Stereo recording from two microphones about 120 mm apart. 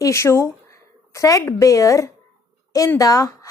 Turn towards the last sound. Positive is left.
turn(degrees=30)  # may be behind; listen again after turning